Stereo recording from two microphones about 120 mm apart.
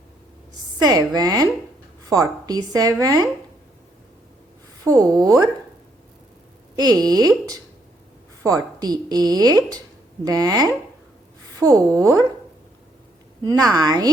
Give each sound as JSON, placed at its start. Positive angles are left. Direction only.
{"t": 0.8, "sound": "a woman's voice", "side_deg": -30}
{"t": 4.8, "sound": "a woman's voice", "side_deg": -30}
{"t": 6.7, "sound": "a woman's voice", "side_deg": -35}
{"t": 13.4, "sound": "a woman's voice", "side_deg": -30}